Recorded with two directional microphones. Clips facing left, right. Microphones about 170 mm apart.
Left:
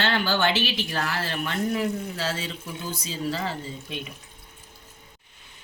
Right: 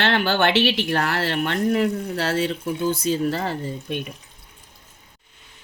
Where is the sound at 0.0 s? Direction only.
65° right (ahead or behind).